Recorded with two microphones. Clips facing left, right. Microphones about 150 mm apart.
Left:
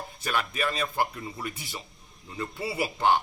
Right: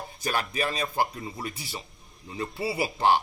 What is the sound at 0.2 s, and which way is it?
Speech, 35° right (ahead or behind).